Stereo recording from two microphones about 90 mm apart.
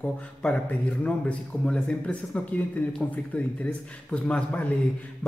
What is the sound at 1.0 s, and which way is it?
Speech, 15° left (ahead or behind).